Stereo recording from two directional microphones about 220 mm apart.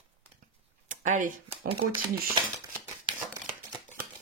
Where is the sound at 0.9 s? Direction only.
35° right (ahead or behind).